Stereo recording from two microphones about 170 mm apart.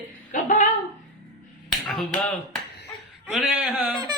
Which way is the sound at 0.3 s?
50° left (ahead or behind).